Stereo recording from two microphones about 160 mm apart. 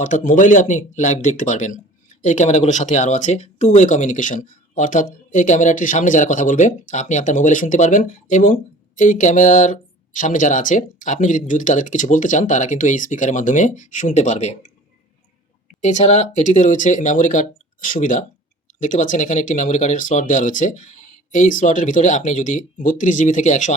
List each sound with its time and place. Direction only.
0.0 s speech: 55° left (ahead or behind)
15.8 s speech: 50° left (ahead or behind)